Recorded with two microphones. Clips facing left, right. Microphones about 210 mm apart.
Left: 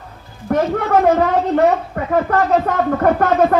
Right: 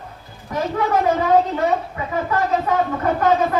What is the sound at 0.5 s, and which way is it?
Speech, 60° left (ahead or behind).